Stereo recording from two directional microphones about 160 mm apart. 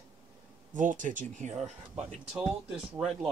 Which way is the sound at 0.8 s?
55° right (ahead or behind).